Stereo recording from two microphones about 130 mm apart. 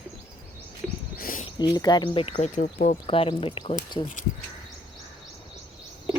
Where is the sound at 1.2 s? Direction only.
90° left.